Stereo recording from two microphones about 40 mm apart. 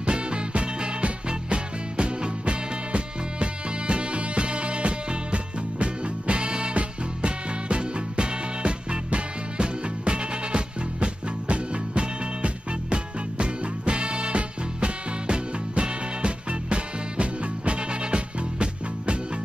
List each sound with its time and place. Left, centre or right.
0.0 s music: right